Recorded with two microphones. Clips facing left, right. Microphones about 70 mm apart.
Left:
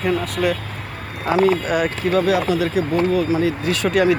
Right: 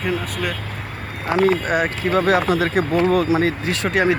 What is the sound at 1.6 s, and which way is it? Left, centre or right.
Speech, right.